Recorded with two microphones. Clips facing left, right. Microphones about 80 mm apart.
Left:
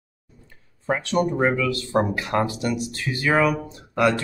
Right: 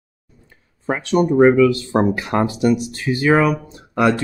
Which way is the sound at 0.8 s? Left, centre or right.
Centre.